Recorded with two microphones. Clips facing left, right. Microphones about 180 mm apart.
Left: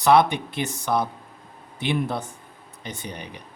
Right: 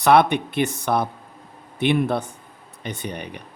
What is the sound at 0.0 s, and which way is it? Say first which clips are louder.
Speech: right 2 dB; 60° right (ahead or behind).